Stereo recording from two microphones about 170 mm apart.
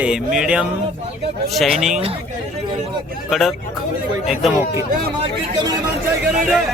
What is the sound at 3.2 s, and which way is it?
Music, centre (ahead or behind).